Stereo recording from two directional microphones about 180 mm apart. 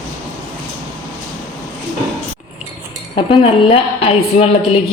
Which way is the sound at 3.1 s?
30° left (ahead or behind).